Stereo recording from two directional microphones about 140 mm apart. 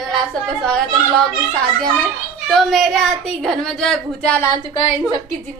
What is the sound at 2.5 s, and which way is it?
A woman's voice, centre (ahead or behind).